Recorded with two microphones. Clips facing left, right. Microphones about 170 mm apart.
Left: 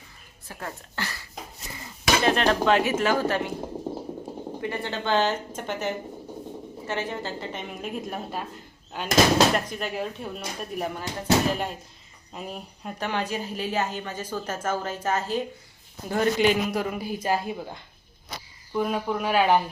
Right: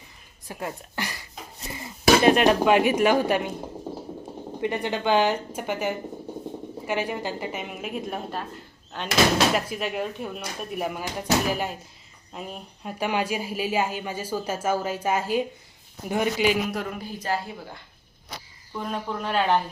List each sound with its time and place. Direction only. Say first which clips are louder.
0.4 s speech: right 4 dB; 15° right (ahead or behind)
4.6 s a woman's voice: right 5 dB; 20° right (ahead or behind); by 8.4 s centre (ahead or behind)
8.9 s speech: even; 10° left (ahead or behind)
9.6 s a woman's voice: right 2 dB; 5° right (ahead or behind)
16.8 s speech: left 3 dB; 10° left (ahead or behind)
18.8 s speech: left 4 dB; 5° left (ahead or behind)